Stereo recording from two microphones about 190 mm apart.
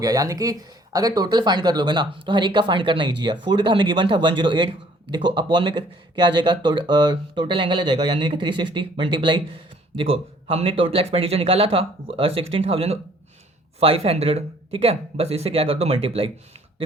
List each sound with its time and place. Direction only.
0.0 s speech: 20° right (ahead or behind)